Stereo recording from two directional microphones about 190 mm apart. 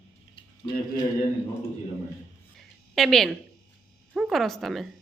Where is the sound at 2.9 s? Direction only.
Centre (ahead or behind).